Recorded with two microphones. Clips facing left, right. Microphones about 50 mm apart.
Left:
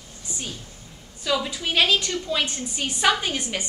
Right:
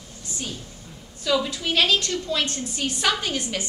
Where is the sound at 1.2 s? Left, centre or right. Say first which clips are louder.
Right 2 dB; centre.